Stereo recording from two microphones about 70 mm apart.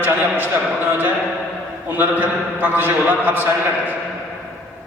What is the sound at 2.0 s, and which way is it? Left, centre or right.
A man's voice, right.